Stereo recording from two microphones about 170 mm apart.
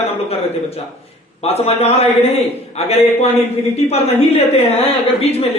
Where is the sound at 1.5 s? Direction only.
40° left (ahead or behind).